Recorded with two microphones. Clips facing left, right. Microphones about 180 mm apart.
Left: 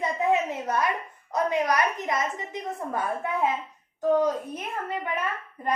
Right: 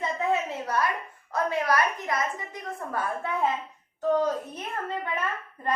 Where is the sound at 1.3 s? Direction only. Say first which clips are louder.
Left 1 dB; 20° left (ahead or behind).